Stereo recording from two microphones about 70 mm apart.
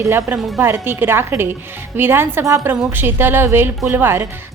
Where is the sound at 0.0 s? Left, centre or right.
Right.